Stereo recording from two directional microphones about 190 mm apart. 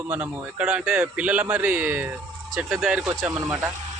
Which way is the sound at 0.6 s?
10° right (ahead or behind).